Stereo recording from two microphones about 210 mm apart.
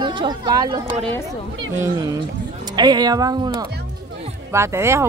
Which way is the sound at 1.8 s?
15° right (ahead or behind).